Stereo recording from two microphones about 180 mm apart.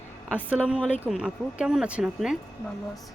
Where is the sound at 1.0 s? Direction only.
5° right (ahead or behind).